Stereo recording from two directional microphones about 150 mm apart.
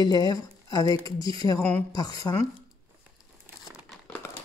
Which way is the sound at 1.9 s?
25° left (ahead or behind).